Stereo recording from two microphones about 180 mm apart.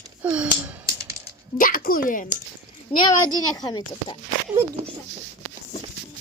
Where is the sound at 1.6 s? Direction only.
50° left (ahead or behind).